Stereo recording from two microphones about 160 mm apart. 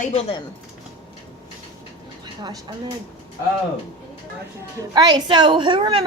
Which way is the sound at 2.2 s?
25° right (ahead or behind).